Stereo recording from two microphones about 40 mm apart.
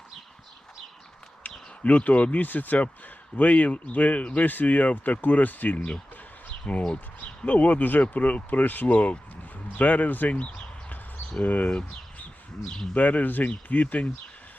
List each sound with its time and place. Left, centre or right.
1.8 s speech: left
4.4 s speech: left
6.7 s speech: left
8.4 s speech: left
12.9 s speech: left